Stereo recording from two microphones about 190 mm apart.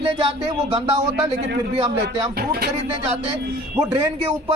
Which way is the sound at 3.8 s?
15° right (ahead or behind).